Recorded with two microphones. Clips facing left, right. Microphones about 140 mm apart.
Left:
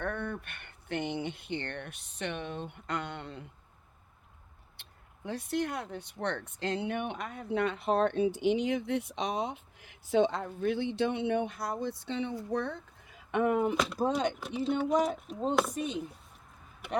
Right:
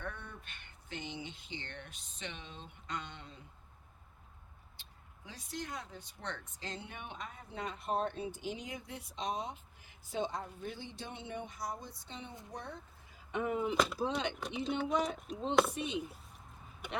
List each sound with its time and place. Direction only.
0.0 s speech: 60° left (ahead or behind)
4.8 s speech: 60° left (ahead or behind)
13.7 s speech: centre (ahead or behind)
15.7 s speech: 45° left (ahead or behind)